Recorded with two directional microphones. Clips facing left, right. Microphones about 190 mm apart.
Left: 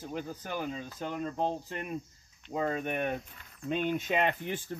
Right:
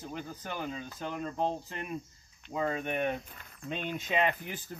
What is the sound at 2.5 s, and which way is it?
Speech, 40° left (ahead or behind).